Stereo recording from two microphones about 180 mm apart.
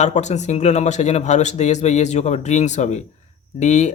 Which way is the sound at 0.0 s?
40° left (ahead or behind).